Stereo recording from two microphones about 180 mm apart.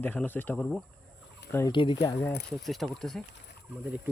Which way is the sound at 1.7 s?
25° left (ahead or behind).